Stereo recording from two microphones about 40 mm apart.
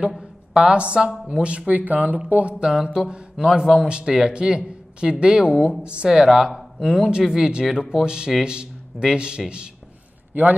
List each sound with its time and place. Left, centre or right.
0.7 s a man's voice: right
1.7 s speech: right
2.6 s a man's voice: centre
6.0 s a man's voice: centre